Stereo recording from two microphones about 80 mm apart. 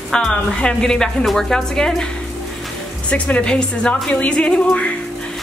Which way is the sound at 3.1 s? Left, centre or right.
Centre.